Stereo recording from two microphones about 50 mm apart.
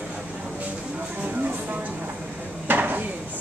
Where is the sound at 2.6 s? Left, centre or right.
Right.